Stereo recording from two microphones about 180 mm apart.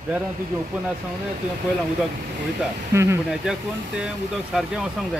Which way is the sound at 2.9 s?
15° right (ahead or behind).